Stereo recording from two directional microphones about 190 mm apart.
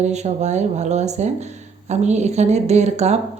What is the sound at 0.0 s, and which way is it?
Speech, 35° right (ahead or behind).